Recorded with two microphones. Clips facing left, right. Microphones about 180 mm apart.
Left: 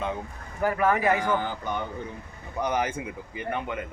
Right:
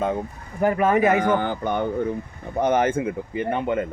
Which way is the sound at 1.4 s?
55° right (ahead or behind).